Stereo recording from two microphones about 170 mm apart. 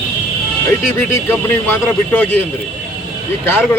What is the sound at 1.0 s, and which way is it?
Speech, 15° left (ahead or behind).